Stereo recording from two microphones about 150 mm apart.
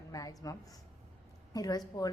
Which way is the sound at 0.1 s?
25° left (ahead or behind).